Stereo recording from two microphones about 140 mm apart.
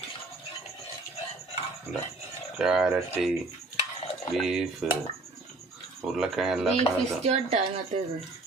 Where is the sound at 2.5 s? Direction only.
5° right (ahead or behind).